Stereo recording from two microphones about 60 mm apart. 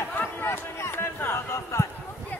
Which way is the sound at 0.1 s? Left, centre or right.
Left.